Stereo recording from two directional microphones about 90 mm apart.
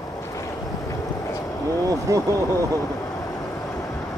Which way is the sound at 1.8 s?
35° right (ahead or behind).